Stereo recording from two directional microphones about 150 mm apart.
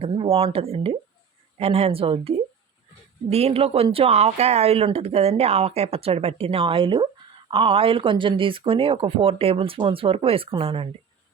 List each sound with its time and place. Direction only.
0.0 s speech: 40° right (ahead or behind)